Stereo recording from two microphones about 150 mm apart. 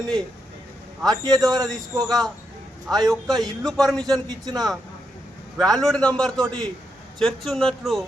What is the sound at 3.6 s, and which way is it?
Speech, 5° left (ahead or behind).